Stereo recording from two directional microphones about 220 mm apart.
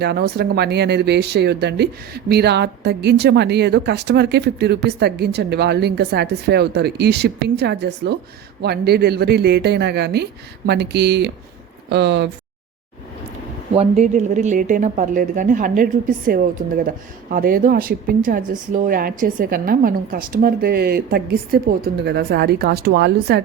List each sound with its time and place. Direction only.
0.0 s speech: 45° right (ahead or behind)
13.7 s speech: 30° right (ahead or behind); by 23.4 s 50° right (ahead or behind)